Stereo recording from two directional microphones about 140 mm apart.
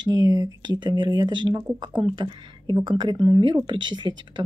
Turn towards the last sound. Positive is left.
turn(degrees=-35)  # may be behind; listen again after turning